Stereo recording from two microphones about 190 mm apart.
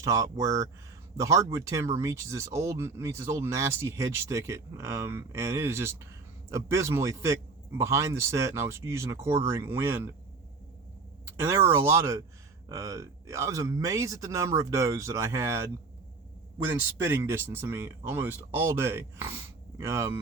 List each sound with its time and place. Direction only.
0.0 s speech: 15° right (ahead or behind)
11.3 s speech: 15° right (ahead or behind)
17.0 s speech: 15° right (ahead or behind)